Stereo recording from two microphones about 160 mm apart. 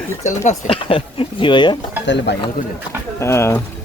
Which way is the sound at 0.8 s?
35° left (ahead or behind).